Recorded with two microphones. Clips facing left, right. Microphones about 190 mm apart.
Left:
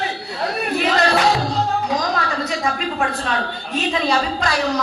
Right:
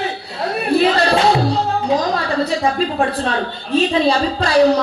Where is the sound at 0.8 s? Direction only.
30° right (ahead or behind).